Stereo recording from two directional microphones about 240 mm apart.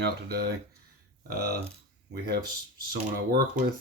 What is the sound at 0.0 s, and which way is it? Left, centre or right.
Speech, right.